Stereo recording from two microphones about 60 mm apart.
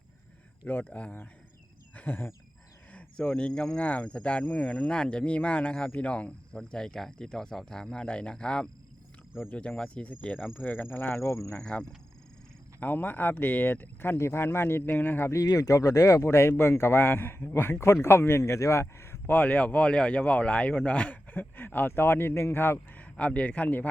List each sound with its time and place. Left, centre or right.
0.7 s speech: left
2.0 s a sound: left
3.5 s speech: centre
3.8 s speech: left
9.5 s speech: left
10.6 s speech: left
11.5 s speech: centre
12.8 s speech: left
14.2 s speech: left
15.3 s speech: left
19.3 s speech: left
23.0 s speech: left